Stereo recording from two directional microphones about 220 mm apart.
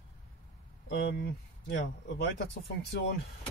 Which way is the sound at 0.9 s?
45° left (ahead or behind).